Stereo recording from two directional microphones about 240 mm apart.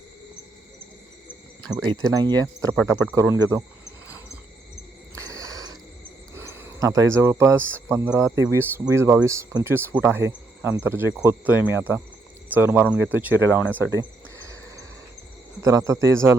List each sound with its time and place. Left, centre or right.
2.1 s speech: centre
5.1 s a sound: centre
6.3 s speech: centre
15.6 s speech: centre